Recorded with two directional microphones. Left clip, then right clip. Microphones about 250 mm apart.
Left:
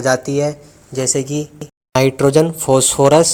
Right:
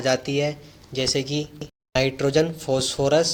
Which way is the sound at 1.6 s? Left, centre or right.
Left.